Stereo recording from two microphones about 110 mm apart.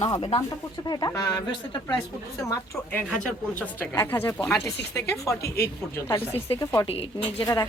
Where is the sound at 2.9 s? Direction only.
10° left (ahead or behind); by 5.3 s 25° left (ahead or behind).